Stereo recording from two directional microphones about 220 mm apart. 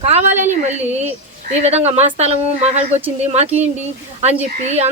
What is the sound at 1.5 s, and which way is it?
Speech, 30° right (ahead or behind).